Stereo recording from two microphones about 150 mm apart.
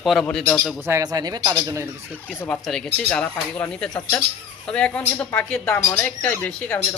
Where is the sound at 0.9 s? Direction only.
20° right (ahead or behind).